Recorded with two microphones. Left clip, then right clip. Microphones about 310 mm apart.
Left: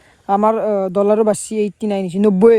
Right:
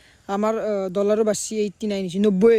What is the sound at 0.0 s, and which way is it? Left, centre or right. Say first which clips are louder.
Speech: left 9 dB; centre.